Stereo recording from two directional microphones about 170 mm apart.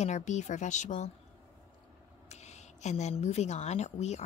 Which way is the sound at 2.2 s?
40° left (ahead or behind).